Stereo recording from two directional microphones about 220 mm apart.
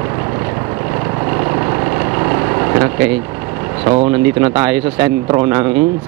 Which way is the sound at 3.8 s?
20° right (ahead or behind).